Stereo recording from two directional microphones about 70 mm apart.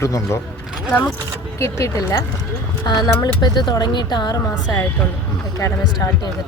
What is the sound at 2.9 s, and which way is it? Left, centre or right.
Speech, left.